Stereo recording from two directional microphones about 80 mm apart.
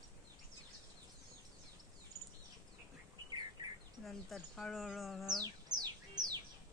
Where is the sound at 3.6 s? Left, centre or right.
Right.